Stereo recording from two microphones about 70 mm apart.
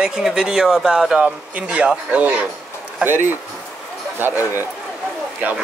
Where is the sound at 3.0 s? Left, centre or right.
Right.